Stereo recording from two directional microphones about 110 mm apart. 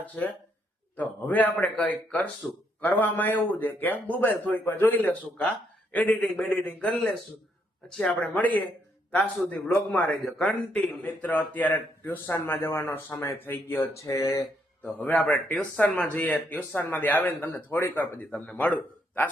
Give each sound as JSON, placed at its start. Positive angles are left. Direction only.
{"t": 0.2, "sound": "speech", "side_deg": 15}
{"t": 14.8, "sound": "speech", "side_deg": 15}